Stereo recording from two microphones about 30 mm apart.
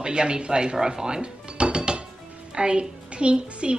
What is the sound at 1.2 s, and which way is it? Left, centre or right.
Dishes, right.